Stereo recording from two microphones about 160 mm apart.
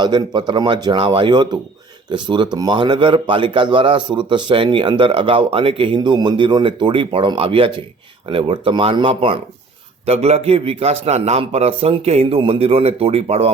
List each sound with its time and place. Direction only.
0.0 s a man's voice: 25° right (ahead or behind)